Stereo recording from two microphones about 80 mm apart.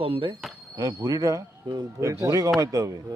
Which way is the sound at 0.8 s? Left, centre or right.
Right.